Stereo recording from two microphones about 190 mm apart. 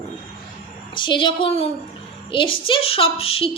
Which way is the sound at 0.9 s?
25° left (ahead or behind).